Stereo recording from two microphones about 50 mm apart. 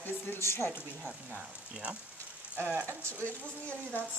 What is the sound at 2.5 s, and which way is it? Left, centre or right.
Speech, right.